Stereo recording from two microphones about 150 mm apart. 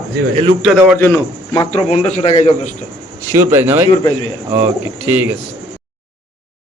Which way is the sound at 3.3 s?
20° right (ahead or behind).